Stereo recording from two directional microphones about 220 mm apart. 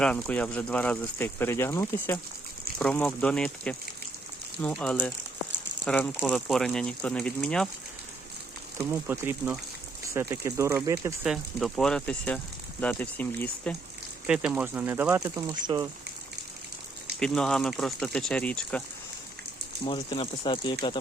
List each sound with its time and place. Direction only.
0.0 s speech: 5° left (ahead or behind)
8.8 s speech: 10° right (ahead or behind); by 13.7 s 5° left (ahead or behind)
14.3 s speech: 5° right (ahead or behind); by 15.9 s 20° right (ahead or behind)
17.2 s speech: 5° left (ahead or behind)
19.8 s speech: 25° left (ahead or behind)